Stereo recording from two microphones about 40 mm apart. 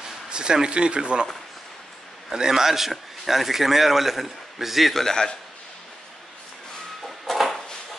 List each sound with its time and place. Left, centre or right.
0.0 s speech: right
2.3 s a man's voice: centre
5.0 s a man's voice: centre
7.0 s a sound: centre